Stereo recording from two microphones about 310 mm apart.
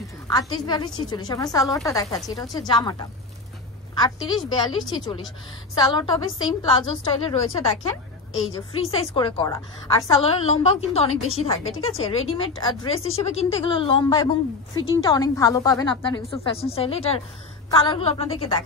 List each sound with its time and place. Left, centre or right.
0.3 s a woman's voice: centre